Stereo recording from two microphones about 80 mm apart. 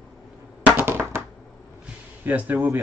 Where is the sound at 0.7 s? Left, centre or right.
Right.